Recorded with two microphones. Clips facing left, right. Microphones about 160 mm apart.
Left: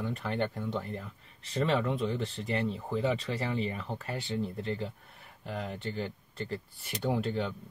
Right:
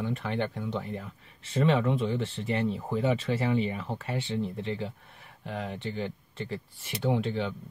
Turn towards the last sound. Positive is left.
turn(degrees=0)  # may be behind; listen again after turning